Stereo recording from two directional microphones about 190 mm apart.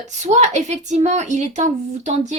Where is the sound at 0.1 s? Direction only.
40° right (ahead or behind).